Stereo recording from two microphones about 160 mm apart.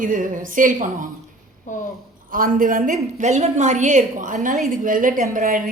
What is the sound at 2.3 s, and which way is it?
A woman's voice, 60° right (ahead or behind).